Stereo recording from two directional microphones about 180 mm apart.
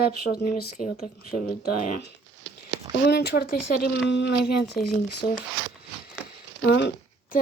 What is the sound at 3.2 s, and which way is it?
Speech, 60° left (ahead or behind).